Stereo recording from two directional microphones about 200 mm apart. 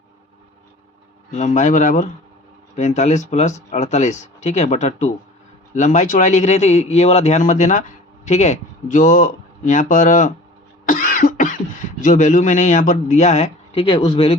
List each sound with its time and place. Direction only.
1.3 s a man's voice: 35° left (ahead or behind)